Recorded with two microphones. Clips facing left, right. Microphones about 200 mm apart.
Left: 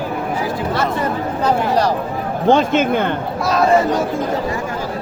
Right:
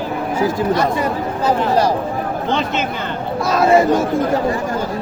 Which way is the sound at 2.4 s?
45° left (ahead or behind).